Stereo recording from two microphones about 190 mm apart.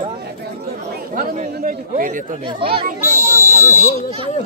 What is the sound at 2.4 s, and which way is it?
Speech, 30° right (ahead or behind).